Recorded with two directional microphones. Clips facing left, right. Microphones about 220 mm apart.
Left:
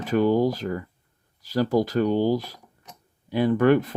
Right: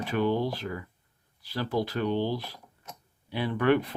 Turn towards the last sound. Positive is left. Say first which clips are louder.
# left 6 dB
turn(degrees=45)  # may be behind; listen again after turning